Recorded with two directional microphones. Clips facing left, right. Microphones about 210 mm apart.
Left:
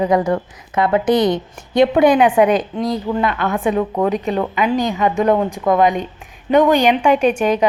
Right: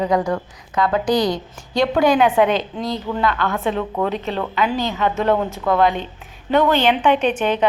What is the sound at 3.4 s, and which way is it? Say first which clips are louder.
A woman's voice: left 4 dB; 15° left (ahead or behind).